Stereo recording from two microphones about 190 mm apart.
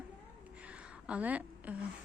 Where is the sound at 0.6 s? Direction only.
5° right (ahead or behind).